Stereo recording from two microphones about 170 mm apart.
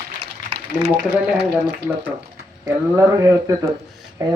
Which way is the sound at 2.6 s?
20° right (ahead or behind).